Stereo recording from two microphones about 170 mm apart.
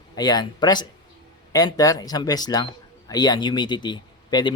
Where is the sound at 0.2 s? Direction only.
25° left (ahead or behind).